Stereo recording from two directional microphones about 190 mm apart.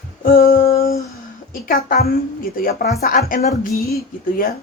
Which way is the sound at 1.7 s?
50° left (ahead or behind).